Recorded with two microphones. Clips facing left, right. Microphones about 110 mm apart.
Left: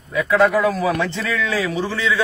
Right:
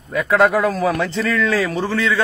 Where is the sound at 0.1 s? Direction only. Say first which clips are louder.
Right 1 dB; 50° right (ahead or behind).